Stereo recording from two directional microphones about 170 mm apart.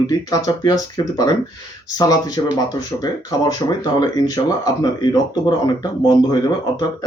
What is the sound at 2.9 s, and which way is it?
Speech, 10° left (ahead or behind).